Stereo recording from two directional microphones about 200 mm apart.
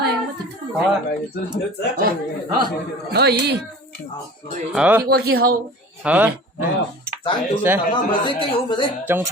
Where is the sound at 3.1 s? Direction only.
55° right (ahead or behind).